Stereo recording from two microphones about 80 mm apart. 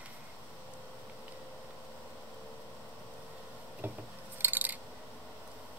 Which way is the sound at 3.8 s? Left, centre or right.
Right.